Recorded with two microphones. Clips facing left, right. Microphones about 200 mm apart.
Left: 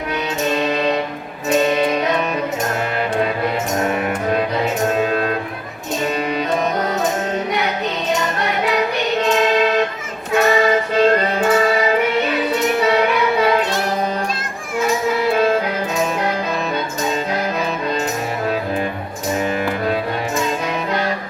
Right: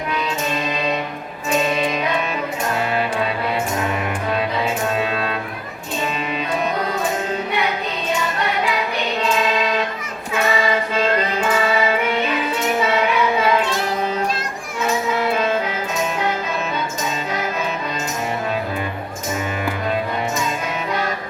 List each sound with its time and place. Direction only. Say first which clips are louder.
4.3 s music: left 2 dB; 45° left (ahead or behind)
9.2 s choir: left 4 dB; 40° left (ahead or behind)
10.3 s music: left 5 dB; 40° left (ahead or behind)